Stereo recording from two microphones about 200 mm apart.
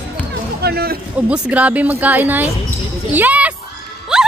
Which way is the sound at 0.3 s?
55° right (ahead or behind).